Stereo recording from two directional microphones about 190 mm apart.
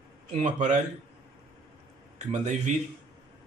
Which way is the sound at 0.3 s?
40° right (ahead or behind).